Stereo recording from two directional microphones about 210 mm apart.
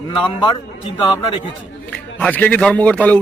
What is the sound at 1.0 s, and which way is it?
Speech, 25° left (ahead or behind).